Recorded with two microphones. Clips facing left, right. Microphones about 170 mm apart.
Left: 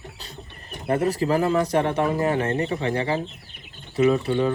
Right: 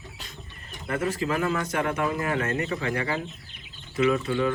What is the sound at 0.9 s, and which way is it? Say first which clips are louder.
Speech: left 6 dB; 35° left (ahead or behind).